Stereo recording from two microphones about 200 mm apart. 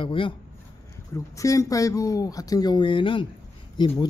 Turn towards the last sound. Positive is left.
turn(degrees=25)  # may be behind; listen again after turning